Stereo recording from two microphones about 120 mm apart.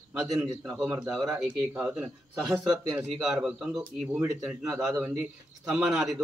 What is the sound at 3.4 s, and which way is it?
Speech, 5° right (ahead or behind).